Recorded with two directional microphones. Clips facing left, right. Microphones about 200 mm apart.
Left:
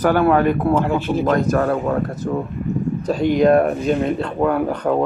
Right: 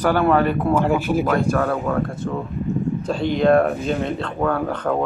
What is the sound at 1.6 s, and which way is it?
Speech, 20° left (ahead or behind).